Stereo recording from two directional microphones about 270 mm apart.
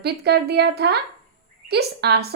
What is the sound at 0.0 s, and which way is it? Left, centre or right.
A woman's voice, right.